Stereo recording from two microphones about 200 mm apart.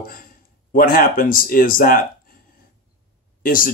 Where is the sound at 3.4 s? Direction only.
45° left (ahead or behind).